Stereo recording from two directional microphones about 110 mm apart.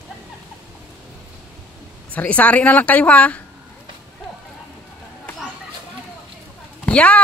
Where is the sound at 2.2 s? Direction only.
15° left (ahead or behind).